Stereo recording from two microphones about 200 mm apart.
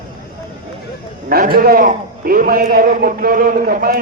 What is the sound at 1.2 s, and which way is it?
A man's voice, 45° right (ahead or behind).